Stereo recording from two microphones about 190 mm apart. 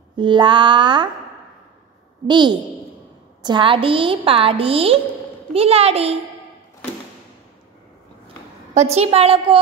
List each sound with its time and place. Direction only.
0.1 s a woman's voice: 25° right (ahead or behind)
2.2 s a woman's voice: 25° right (ahead or behind)
8.7 s a woman's voice: 35° right (ahead or behind)